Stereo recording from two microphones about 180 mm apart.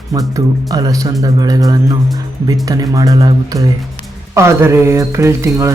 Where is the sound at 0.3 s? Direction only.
20° right (ahead or behind).